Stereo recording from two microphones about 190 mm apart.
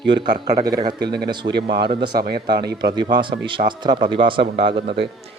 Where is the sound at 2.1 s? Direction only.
55° right (ahead or behind).